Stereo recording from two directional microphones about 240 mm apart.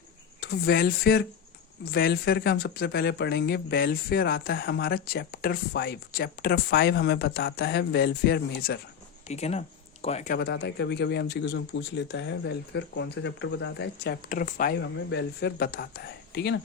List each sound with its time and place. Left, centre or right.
0.3 s speech: left
9.2 s speech: left
10.3 s speech: left